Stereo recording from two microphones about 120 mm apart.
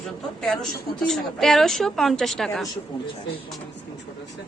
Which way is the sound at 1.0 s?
5° left (ahead or behind).